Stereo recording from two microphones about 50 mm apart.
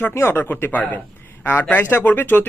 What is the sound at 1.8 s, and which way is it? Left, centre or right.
Speech, left.